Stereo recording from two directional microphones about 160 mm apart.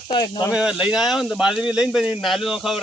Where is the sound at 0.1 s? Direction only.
25° left (ahead or behind).